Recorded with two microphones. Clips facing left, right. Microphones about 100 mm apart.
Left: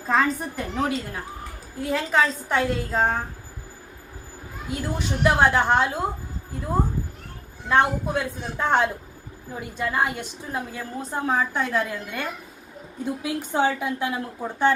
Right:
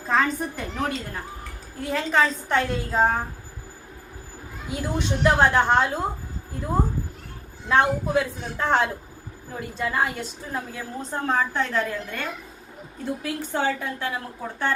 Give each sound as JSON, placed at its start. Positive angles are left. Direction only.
{"t": 0.1, "sound": "a woman's voice", "side_deg": 0}
{"t": 4.7, "sound": "a woman's voice", "side_deg": 5}
{"t": 7.7, "sound": "a woman's voice", "side_deg": 0}
{"t": 10.2, "sound": "a woman's voice", "side_deg": 10}